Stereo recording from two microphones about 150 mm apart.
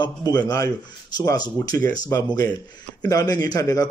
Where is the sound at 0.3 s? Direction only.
25° left (ahead or behind).